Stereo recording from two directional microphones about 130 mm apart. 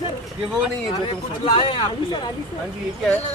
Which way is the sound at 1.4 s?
35° left (ahead or behind).